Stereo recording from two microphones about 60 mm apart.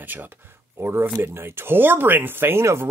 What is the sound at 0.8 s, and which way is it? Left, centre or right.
Speech, right.